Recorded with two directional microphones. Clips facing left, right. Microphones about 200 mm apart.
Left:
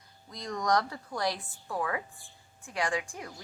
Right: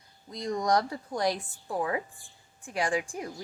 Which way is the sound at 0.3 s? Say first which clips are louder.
Right 3 dB; 25° right (ahead or behind).